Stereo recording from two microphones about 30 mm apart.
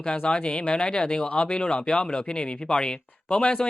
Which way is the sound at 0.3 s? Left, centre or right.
Left.